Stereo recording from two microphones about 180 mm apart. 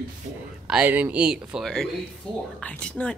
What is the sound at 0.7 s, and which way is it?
A woman's voice, 10° right (ahead or behind).